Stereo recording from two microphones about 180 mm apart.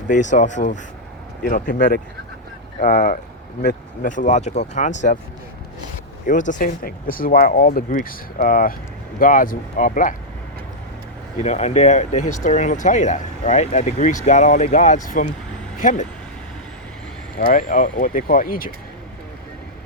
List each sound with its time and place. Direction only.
0.1 s speech: 45° left (ahead or behind)
2.8 s speech: 55° left (ahead or behind)
6.2 s speech: 45° left (ahead or behind)
11.3 s speech: 40° left (ahead or behind)
17.3 s speech: 50° left (ahead or behind)